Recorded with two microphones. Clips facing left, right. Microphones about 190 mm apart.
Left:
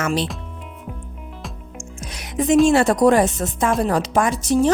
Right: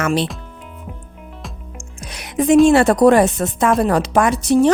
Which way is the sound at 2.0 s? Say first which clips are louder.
Right 3 dB; 65° right (ahead or behind).